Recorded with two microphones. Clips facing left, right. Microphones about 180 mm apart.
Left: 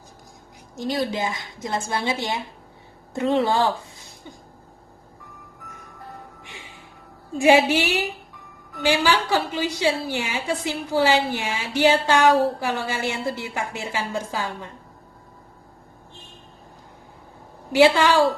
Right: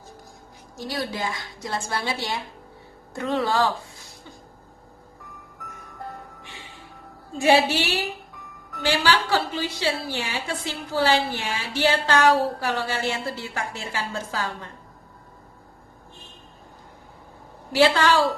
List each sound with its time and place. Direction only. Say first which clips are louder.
0.8 s a woman's voice: left 4 dB; 20° left (ahead or behind)
7.3 s a woman's voice: left 3 dB; 15° left (ahead or behind)
17.7 s a woman's voice: left 3 dB; 15° left (ahead or behind)